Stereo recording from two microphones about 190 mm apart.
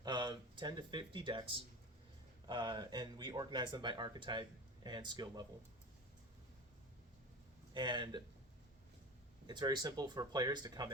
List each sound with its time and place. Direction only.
0.0 s speech: 20° right (ahead or behind)
7.7 s speech: 25° right (ahead or behind)
9.5 s speech: 20° right (ahead or behind)